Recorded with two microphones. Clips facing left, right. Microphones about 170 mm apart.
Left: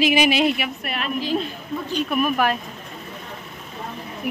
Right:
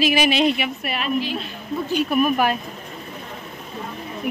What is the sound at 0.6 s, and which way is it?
Speech, 5° right (ahead or behind).